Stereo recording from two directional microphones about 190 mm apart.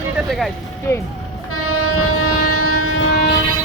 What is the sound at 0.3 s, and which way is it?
Speech, centre (ahead or behind).